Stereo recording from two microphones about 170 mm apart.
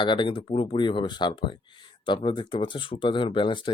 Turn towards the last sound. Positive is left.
turn(degrees=30)  # may be behind; listen again after turning